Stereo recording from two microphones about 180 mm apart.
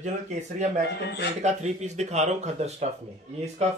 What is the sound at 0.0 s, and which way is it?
Speech, 40° right (ahead or behind).